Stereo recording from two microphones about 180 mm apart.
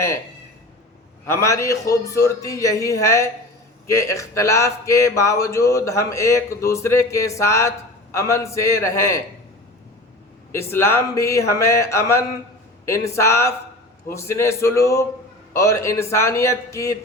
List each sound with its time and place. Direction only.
1.3 s speech: 15° left (ahead or behind)
10.5 s speech: 15° left (ahead or behind)